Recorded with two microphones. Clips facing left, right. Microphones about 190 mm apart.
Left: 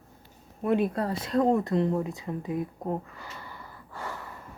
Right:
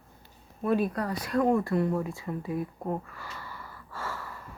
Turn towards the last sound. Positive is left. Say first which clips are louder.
# even
turn(degrees=20)  # may be behind; listen again after turning